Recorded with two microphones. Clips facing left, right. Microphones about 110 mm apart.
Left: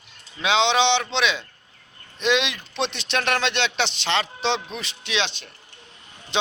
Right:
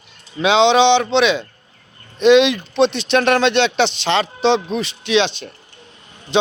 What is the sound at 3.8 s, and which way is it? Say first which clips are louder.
Speech: right 9 dB; 15° right (ahead or behind).